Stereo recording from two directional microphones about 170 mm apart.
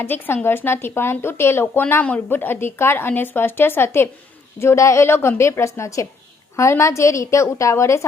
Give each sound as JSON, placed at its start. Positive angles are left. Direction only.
{"t": 0.0, "sound": "speech", "side_deg": 10}